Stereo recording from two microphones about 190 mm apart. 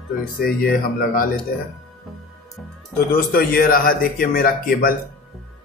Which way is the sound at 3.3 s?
50° left (ahead or behind).